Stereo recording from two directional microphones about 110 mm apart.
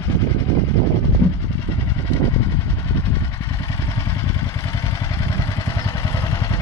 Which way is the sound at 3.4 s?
35° left (ahead or behind).